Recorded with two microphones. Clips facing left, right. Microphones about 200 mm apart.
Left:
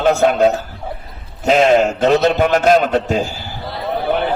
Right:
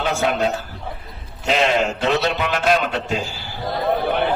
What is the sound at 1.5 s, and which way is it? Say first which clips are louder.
A man's voice: left 7 dB; 45° left (ahead or behind).